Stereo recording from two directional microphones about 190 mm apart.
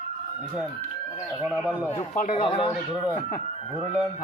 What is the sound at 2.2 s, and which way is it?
Speech, 35° left (ahead or behind).